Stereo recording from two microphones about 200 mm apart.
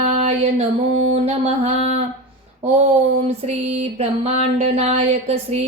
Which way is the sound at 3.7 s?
30° right (ahead or behind).